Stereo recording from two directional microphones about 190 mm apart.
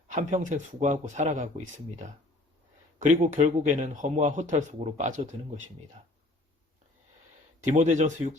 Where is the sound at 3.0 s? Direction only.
40° right (ahead or behind).